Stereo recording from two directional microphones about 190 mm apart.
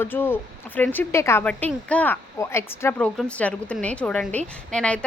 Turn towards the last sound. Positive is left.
turn(degrees=5)  # may be behind; listen again after turning